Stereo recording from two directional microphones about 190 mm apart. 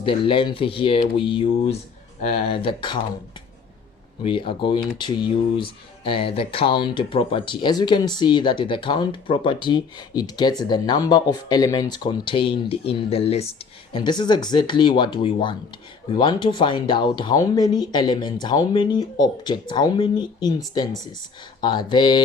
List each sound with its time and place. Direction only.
0.0 s speech: 25° left (ahead or behind)
4.2 s speech: 25° left (ahead or behind)
21.6 s speech: 25° left (ahead or behind)